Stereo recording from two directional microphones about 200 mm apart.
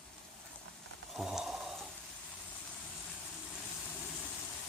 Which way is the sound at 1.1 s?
5° right (ahead or behind).